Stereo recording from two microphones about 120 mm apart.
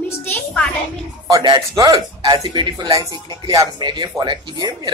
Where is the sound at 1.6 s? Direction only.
30° right (ahead or behind).